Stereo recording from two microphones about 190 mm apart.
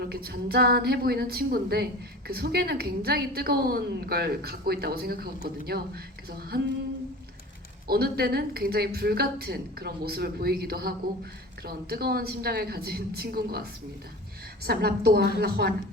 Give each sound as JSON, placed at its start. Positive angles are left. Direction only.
{"t": 0.0, "sound": "a woman's voice", "side_deg": -55}
{"t": 7.9, "sound": "a woman's voice", "side_deg": -55}